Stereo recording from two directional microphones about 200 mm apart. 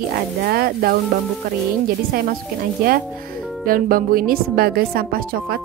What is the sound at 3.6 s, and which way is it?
A woman's voice, 45° right (ahead or behind).